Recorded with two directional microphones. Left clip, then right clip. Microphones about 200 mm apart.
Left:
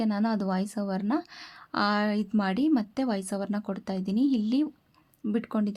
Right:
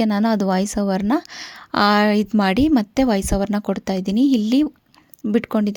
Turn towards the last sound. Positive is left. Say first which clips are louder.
# right 10 dB
turn(degrees=-35)  # may be behind; listen again after turning